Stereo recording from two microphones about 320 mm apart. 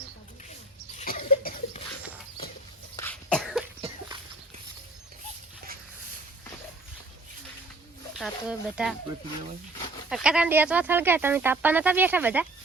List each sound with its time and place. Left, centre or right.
0.9 s cough: left
2.9 s cough: centre
3.8 s a sound: centre
8.2 s speech: centre
10.1 s speech: centre